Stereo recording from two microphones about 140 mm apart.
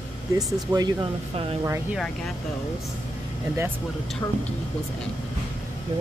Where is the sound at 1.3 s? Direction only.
40° right (ahead or behind).